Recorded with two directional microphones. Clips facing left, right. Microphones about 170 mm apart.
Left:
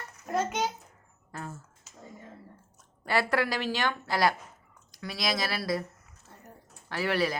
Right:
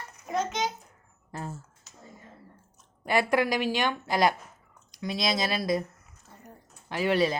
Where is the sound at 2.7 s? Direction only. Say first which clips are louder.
Right 2 dB; 20° right (ahead or behind).